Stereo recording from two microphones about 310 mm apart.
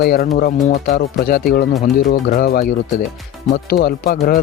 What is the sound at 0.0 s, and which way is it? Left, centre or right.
Speech, left.